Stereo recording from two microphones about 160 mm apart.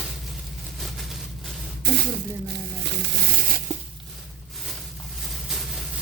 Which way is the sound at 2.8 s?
80° right.